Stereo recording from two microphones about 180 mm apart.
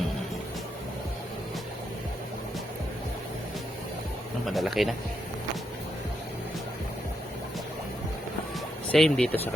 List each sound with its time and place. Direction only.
4.4 s speech: centre (ahead or behind)
8.9 s speech: 5° left (ahead or behind)